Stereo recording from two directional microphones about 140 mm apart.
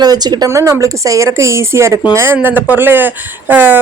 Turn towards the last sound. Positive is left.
turn(degrees=-15)  # may be behind; listen again after turning